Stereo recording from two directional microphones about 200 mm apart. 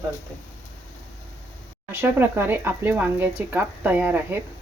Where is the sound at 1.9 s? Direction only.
10° right (ahead or behind).